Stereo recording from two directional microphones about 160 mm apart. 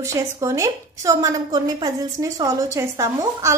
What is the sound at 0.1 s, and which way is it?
A woman's voice, 20° right (ahead or behind).